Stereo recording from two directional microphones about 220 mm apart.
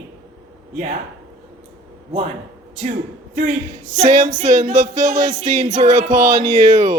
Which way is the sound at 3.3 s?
35° right (ahead or behind).